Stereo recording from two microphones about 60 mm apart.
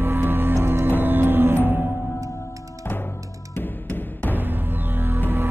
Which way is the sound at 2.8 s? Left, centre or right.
Left.